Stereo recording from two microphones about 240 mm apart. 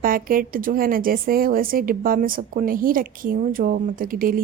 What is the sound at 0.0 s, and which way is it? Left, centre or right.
Speech, right.